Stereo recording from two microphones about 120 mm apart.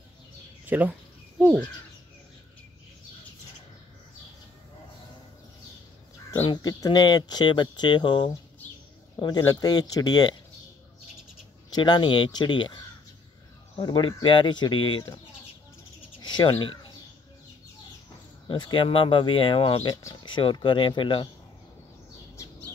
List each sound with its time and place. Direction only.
0.7 s speech: 15° right (ahead or behind)
6.4 s speech: 35° left (ahead or behind)
9.5 s speech: 35° left (ahead or behind)
11.7 s speech: 40° left (ahead or behind)
13.8 s speech: 40° left (ahead or behind)
16.2 s bird: 35° left (ahead or behind)
18.5 s speech: 45° left (ahead or behind)